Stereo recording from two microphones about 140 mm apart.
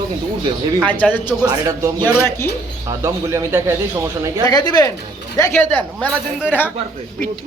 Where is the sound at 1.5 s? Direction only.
25° right (ahead or behind).